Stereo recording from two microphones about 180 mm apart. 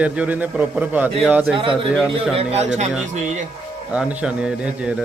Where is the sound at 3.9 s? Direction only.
5° right (ahead or behind).